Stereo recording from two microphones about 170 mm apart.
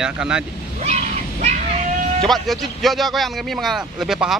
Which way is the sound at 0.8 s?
40° right (ahead or behind).